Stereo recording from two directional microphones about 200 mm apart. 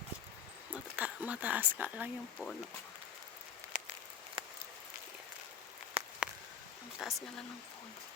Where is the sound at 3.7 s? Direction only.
45° right (ahead or behind).